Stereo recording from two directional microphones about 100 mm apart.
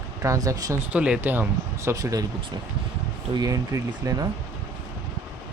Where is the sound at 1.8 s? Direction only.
35° right (ahead or behind).